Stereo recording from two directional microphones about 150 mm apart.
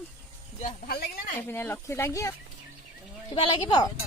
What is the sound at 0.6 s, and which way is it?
Speech, 90° left.